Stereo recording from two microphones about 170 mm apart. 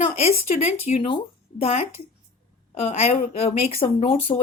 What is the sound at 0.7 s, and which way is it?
Speech, 40° left (ahead or behind).